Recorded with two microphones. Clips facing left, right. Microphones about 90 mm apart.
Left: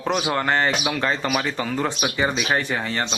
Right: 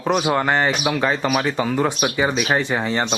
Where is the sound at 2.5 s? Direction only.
20° right (ahead or behind).